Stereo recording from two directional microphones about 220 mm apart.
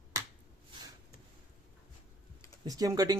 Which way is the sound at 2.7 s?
15° right (ahead or behind).